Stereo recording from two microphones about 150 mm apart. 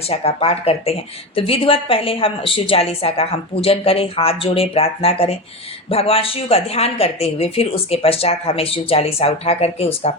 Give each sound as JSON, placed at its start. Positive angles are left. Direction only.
{"t": 0.1, "sound": "speech", "side_deg": 40}